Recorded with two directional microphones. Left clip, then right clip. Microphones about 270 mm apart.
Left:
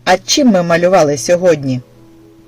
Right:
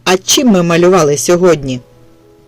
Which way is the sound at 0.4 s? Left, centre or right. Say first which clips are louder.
Right 1 dB; right.